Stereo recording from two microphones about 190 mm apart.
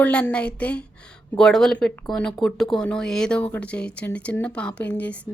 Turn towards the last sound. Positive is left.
turn(degrees=5)  # may be behind; listen again after turning